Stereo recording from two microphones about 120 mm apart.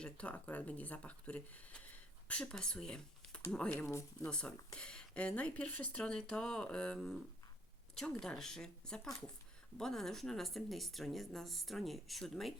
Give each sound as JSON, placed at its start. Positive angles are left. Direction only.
{"t": 0.0, "sound": "speech", "side_deg": 10}
{"t": 3.8, "sound": "speech", "side_deg": 25}
{"t": 4.3, "sound": "speech", "side_deg": 5}
{"t": 8.2, "sound": "speech", "side_deg": 5}